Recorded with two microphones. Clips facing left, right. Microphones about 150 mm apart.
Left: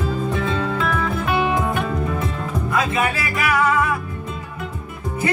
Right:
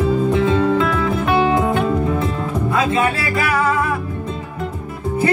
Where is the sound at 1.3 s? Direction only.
30° right (ahead or behind).